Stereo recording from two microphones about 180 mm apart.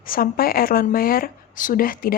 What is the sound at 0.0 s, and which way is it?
Speech, 55° left (ahead or behind).